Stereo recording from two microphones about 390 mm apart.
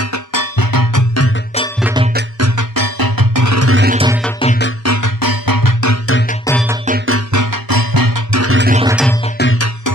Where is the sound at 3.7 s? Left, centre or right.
Right.